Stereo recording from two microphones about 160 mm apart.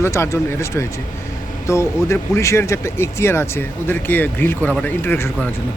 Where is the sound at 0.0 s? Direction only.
15° left (ahead or behind).